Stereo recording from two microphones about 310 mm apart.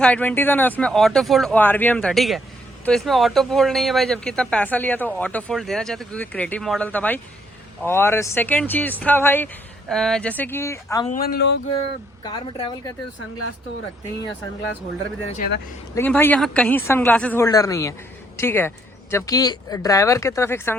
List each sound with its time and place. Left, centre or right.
0.0 s a man's voice: centre
11.1 s speech: left
12.2 s a man's voice: centre
15.3 s speech: left
16.0 s a man's voice: centre